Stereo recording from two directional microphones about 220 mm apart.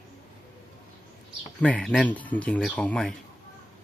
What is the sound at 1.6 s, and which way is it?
Speech, 5° left (ahead or behind).